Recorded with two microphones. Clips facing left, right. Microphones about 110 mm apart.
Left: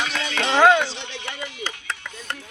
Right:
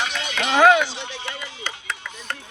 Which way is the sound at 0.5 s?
10° right (ahead or behind).